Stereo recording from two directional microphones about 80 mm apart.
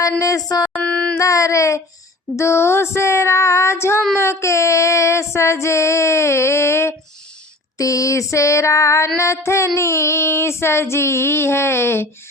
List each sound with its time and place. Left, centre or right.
0.2 s speech: left
0.7 s female singing: centre
1.2 s music: left
7.8 s music: left